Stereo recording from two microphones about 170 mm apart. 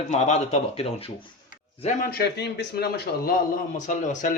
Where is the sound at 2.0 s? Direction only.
70° left (ahead or behind); by 4.3 s 50° left (ahead or behind).